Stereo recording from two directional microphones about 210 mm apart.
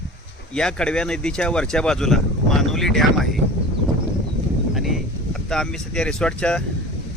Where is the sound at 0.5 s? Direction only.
5° left (ahead or behind).